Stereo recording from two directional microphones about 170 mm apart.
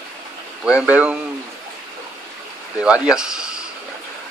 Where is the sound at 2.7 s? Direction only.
5° right (ahead or behind).